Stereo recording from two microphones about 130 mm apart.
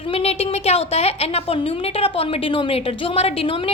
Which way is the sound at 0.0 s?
50° left (ahead or behind).